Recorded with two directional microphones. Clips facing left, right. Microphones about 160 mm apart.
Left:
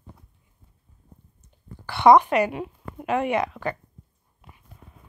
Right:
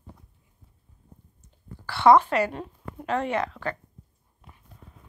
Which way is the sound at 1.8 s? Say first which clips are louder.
Left 2 dB; 15° left (ahead or behind).